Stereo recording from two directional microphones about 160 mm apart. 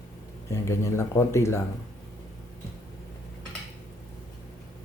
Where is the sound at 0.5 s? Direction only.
15° left (ahead or behind).